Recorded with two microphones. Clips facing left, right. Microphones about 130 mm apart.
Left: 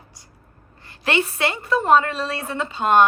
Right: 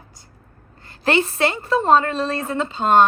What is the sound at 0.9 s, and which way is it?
A woman's voice, 35° right (ahead or behind).